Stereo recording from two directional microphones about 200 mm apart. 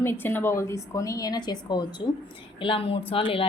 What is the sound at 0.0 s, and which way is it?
A woman's voice, 10° left (ahead or behind).